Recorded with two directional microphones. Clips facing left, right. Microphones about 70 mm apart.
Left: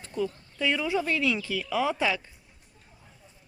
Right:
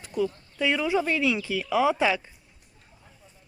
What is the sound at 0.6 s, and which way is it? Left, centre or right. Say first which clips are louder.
Speech: right 3 dB; centre.